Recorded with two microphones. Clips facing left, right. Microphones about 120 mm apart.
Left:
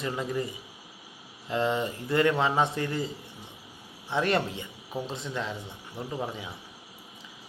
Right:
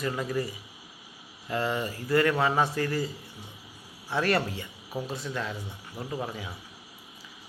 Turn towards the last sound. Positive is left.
turn(degrees=20)  # may be behind; listen again after turning